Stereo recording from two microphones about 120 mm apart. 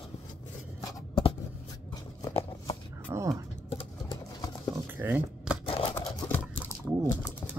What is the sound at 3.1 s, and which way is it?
Music, 30° right (ahead or behind).